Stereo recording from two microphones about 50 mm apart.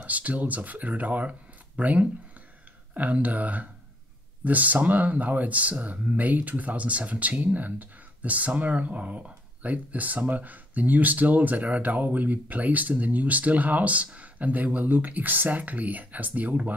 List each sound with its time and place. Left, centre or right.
0.0 s speech: right